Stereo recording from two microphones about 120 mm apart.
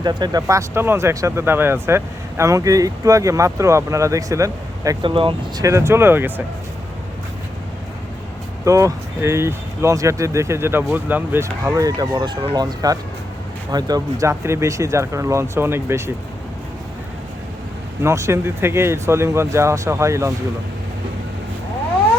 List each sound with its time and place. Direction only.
0.0 s speech: 35° right (ahead or behind)
5.0 s speech: 45° right (ahead or behind)
5.6 s speech: 25° right (ahead or behind)
8.6 s speech: 25° right (ahead or behind)
18.0 s speech: 25° right (ahead or behind)